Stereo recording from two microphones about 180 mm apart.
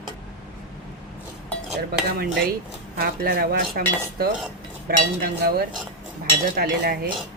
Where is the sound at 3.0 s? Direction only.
60° right (ahead or behind).